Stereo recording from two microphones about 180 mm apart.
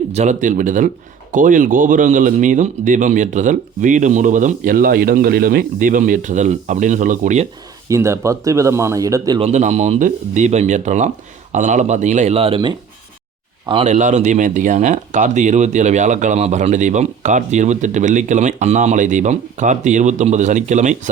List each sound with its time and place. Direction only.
0.1 s speech: 40° right (ahead or behind)
7.9 s speech: 15° right (ahead or behind)
9.4 s speech: 40° right (ahead or behind)
13.8 s speech: 40° right (ahead or behind)